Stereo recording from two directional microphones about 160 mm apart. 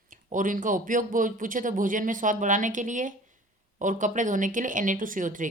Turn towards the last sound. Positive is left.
turn(degrees=-55)  # may be behind; listen again after turning